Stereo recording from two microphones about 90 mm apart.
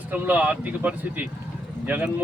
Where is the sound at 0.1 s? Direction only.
20° right (ahead or behind).